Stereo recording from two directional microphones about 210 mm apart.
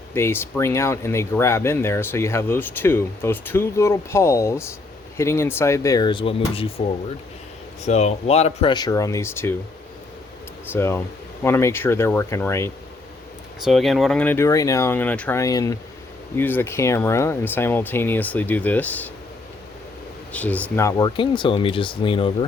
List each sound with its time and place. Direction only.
0.1 s speech: 10° left (ahead or behind)
10.7 s speech: 10° left (ahead or behind)
13.7 s speech: centre (ahead or behind)
20.3 s speech: 5° left (ahead or behind); by 22.4 s 25° left (ahead or behind)